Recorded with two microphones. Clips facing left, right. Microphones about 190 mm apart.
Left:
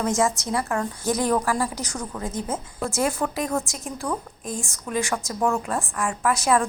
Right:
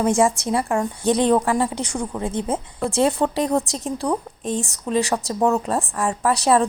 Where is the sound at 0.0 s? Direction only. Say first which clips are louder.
Right 5 dB; 30° right (ahead or behind).